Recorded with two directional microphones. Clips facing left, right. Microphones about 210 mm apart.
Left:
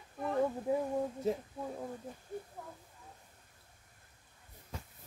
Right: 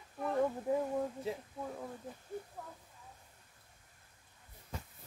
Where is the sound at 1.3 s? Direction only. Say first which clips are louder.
Left 6 dB; 45° left (ahead or behind).